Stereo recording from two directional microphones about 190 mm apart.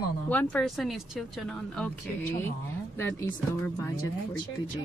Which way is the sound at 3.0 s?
10° left (ahead or behind).